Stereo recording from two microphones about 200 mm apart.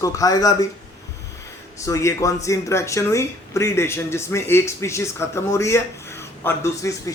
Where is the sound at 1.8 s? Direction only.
15° left (ahead or behind).